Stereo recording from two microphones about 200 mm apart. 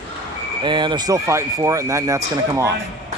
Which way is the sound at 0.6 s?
25° right (ahead or behind).